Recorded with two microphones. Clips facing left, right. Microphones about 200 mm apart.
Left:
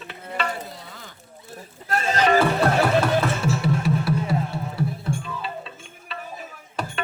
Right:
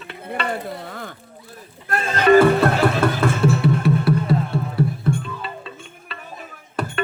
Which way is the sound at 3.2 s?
55° right (ahead or behind).